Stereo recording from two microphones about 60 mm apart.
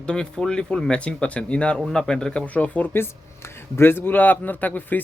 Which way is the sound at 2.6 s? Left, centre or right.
Left.